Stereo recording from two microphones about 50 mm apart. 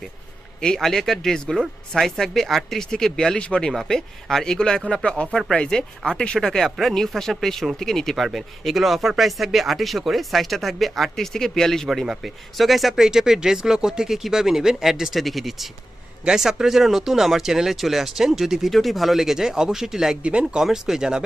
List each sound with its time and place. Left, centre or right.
0.6 s speech: centre
0.9 s speech: centre
3.7 s speech: centre
6.7 s speech: centre
11.9 s speech: centre